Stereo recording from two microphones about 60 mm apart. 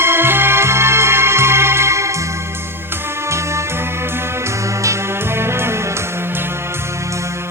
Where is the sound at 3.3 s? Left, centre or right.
Right.